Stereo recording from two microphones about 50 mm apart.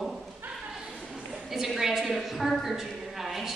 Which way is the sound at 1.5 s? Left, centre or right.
Centre.